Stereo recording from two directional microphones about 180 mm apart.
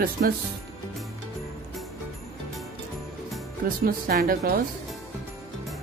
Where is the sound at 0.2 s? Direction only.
55° right (ahead or behind).